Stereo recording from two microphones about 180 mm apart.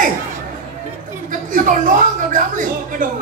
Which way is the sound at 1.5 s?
50° right (ahead or behind).